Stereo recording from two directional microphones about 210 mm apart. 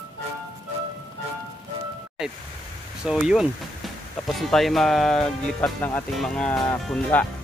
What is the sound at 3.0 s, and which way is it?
Speech, 5° right (ahead or behind).